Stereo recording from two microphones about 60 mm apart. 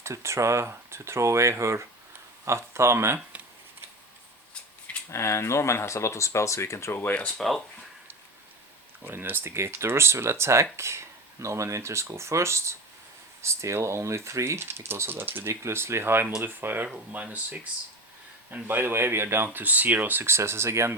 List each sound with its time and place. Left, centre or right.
0.0 s speech: right
5.1 s speech: left
7.1 s speech: left
7.3 s speech: centre
9.0 s speech: right
15.6 s speech: right
18.5 s speech: right
19.5 s speech: right
20.2 s speech: right